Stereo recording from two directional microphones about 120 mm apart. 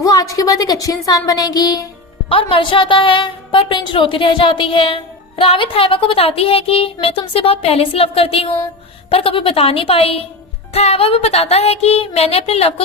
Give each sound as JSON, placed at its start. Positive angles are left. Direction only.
{"t": 0.0, "sound": "speech", "side_deg": 30}
{"t": 2.3, "sound": "a woman's voice", "side_deg": 45}
{"t": 10.7, "sound": "music", "side_deg": 60}